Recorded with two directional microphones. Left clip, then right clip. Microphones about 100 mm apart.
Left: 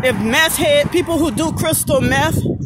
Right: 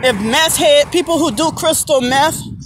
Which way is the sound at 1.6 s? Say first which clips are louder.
Right 2 dB; 35° left (ahead or behind).